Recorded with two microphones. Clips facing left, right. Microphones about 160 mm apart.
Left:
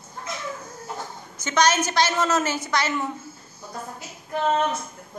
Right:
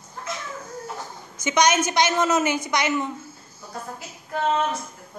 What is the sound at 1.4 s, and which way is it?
A man's voice, 15° right (ahead or behind).